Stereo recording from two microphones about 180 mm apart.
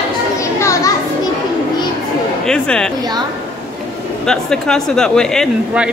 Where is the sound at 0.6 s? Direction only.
15° left (ahead or behind).